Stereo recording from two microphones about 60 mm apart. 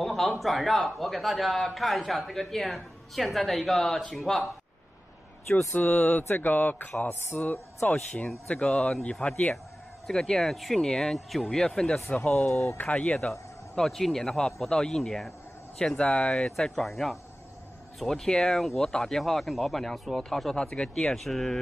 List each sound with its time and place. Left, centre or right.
0.0 s a man's voice: centre
5.7 s speech: left
7.1 s a sound: left
7.8 s speech: centre
10.0 s speech: centre
12.2 s speech: left
12.7 s speech: left
13.2 s a man's voice: centre